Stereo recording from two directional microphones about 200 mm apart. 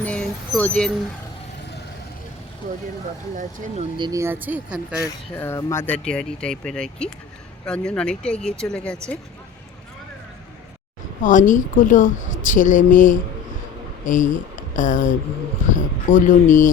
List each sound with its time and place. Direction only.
0.0 s vehicle: 5° left (ahead or behind)
3.3 s speech: 40° right (ahead or behind)
3.9 s speech: 20° right (ahead or behind)
5.0 s speech: 15° left (ahead or behind)
11.2 s a woman's voice: 40° left (ahead or behind)